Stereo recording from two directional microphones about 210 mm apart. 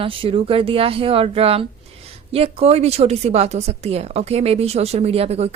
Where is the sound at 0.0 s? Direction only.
25° right (ahead or behind).